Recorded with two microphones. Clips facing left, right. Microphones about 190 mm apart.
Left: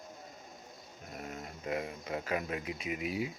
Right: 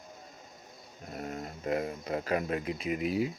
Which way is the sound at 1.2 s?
45° right (ahead or behind).